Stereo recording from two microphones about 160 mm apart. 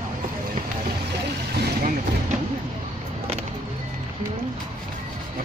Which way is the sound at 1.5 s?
90° right.